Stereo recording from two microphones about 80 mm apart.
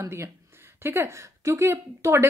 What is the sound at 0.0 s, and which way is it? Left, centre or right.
Speech, right.